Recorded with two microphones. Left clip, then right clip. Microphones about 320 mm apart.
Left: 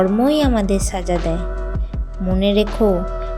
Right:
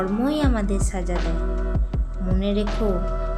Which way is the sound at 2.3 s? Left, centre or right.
Centre.